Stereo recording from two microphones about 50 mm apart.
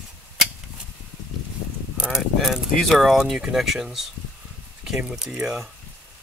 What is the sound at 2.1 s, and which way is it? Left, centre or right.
Speech, centre.